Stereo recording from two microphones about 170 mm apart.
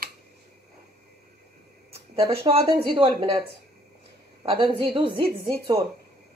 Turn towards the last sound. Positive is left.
turn(degrees=-30)  # may be behind; listen again after turning